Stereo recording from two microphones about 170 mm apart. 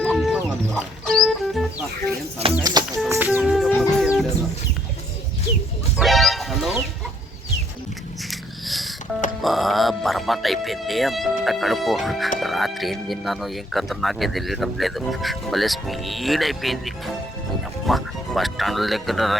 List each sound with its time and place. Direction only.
0.0 s music: centre (ahead or behind)
2.6 s music: 20° right (ahead or behind)
3.1 s music: 10° right (ahead or behind)
6.0 s music: centre (ahead or behind)
8.3 s wheeze: centre (ahead or behind)
9.4 s speech: centre (ahead or behind)